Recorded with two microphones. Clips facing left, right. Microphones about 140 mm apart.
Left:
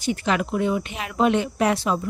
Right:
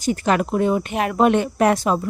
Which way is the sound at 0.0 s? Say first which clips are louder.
Right 4 dB; 45° right (ahead or behind).